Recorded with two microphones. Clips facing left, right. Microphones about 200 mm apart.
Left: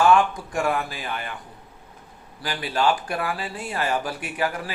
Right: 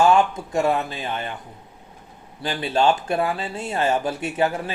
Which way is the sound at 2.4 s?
25° right (ahead or behind).